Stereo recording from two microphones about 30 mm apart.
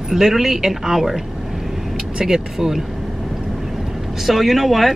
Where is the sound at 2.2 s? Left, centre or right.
Centre.